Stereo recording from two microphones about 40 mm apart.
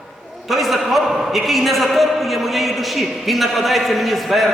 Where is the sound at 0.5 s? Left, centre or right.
Centre.